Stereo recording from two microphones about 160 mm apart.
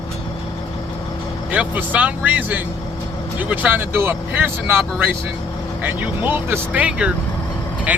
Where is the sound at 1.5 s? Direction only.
10° right (ahead or behind).